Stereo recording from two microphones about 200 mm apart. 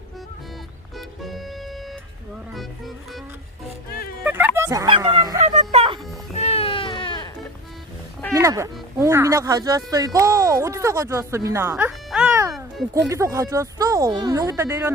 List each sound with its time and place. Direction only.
0.9 s music: centre (ahead or behind)
2.5 s speech: centre (ahead or behind)
4.2 s bow-wow: 10° right (ahead or behind)
5.5 s music: 30° right (ahead or behind)
6.3 s baby cry: 30° left (ahead or behind)
8.3 s speech: 15° right (ahead or behind)